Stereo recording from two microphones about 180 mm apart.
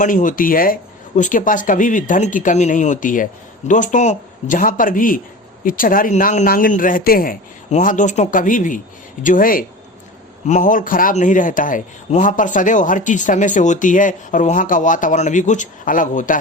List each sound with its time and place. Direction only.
0.0 s speech: 45° left (ahead or behind)